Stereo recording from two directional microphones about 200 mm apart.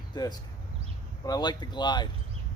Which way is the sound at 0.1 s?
20° left (ahead or behind).